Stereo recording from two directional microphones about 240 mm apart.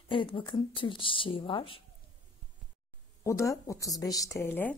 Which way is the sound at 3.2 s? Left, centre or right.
Centre.